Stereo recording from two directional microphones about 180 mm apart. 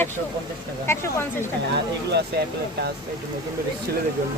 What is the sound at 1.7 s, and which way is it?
Speech, 65° right (ahead or behind).